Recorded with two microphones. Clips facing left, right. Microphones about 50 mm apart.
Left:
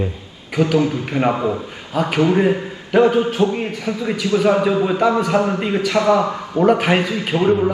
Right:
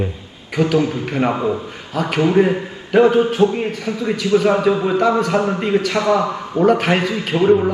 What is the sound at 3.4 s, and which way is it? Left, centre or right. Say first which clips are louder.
Speech: right 2 dB; right.